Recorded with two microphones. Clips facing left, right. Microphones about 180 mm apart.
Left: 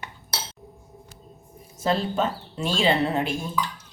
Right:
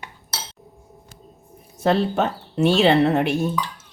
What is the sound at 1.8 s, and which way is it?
Speech, 65° right (ahead or behind).